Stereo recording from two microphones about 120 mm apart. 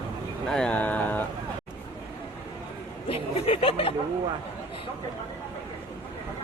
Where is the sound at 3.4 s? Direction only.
50° left (ahead or behind).